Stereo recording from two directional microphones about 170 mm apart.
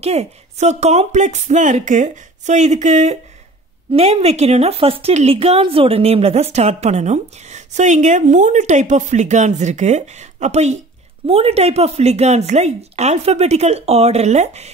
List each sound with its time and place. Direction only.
0.0 s a woman's voice: 40° right (ahead or behind)